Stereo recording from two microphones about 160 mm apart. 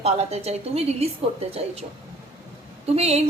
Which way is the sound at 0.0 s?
40° right (ahead or behind).